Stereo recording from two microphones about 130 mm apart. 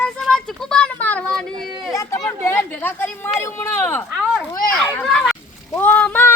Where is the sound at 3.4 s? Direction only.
15° left (ahead or behind).